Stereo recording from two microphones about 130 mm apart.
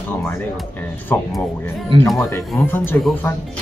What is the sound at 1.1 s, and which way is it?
Speech, 15° left (ahead or behind).